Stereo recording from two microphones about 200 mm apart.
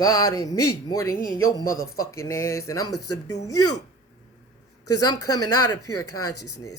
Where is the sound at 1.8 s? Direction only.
50° left (ahead or behind).